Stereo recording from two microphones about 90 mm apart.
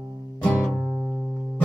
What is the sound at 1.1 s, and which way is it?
Music, 5° left (ahead or behind).